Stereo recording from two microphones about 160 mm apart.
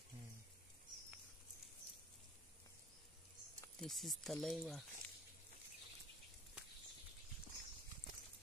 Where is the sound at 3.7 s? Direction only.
Centre (ahead or behind).